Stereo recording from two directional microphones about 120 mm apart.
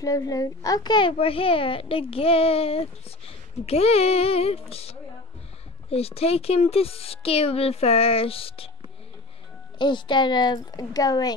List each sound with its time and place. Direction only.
0.0 s a child's voice: 30° left (ahead or behind); by 8.6 s 50° left (ahead or behind)
9.8 s a child's voice: 40° left (ahead or behind)